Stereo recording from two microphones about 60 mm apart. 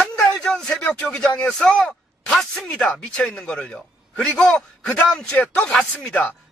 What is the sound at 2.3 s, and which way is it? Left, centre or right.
Speech, centre.